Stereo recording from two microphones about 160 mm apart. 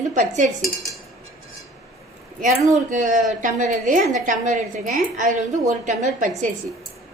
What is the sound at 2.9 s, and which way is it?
A woman's voice, 50° right (ahead or behind).